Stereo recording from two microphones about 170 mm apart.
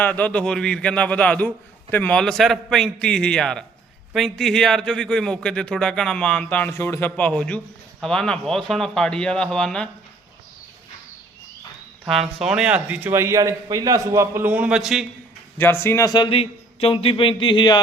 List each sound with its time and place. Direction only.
0.0 s a man's voice: 10° left (ahead or behind)
12.0 s a man's voice: centre (ahead or behind)
15.5 s a man's voice: 15° left (ahead or behind); by 17.7 s 30° left (ahead or behind)